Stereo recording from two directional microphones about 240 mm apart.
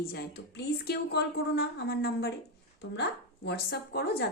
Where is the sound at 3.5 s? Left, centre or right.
Left.